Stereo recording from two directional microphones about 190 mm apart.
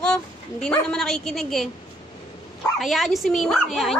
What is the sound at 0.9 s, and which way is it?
Speech, 5° left (ahead or behind).